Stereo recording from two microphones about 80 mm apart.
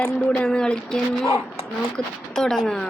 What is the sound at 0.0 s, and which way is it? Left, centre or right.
Speech, centre.